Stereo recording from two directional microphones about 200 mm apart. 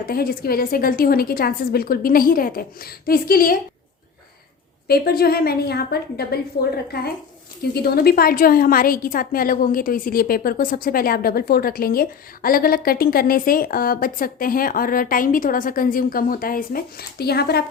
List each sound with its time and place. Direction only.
0.0 s a woman's voice: 50° left (ahead or behind)
4.9 s a woman's voice: 50° left (ahead or behind)
7.6 s a woman's voice: 50° left (ahead or behind)